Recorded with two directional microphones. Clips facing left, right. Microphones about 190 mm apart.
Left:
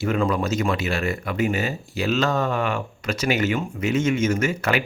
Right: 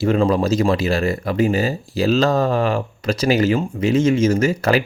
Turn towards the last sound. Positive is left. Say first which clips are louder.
# right 5 dB
turn(degrees=-35)  # may be behind; listen again after turning